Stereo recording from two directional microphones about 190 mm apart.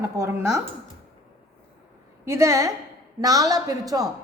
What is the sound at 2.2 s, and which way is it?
A woman's voice, 15° right (ahead or behind).